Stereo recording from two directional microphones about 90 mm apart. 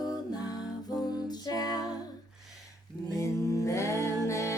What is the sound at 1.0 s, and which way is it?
Music, 50° left (ahead or behind).